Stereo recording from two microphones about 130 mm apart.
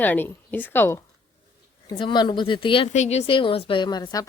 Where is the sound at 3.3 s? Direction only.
40° left (ahead or behind).